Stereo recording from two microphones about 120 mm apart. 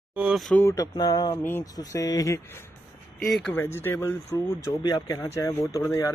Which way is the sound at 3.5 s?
20° left (ahead or behind).